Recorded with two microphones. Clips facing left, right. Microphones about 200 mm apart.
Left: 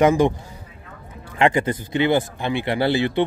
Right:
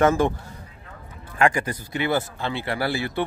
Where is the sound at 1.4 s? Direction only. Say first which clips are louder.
Left 3 dB; 25° left (ahead or behind).